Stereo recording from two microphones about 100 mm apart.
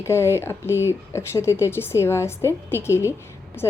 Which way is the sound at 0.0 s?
25° left (ahead or behind).